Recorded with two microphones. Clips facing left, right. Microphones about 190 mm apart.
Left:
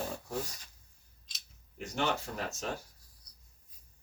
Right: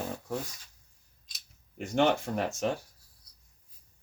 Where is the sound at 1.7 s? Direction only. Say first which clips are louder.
Right 7 dB; 60° right (ahead or behind).